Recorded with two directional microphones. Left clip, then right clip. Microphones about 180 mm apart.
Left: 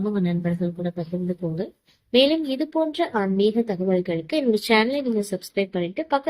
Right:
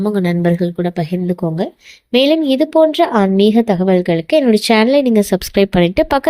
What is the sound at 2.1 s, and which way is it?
A woman's voice, 55° right (ahead or behind).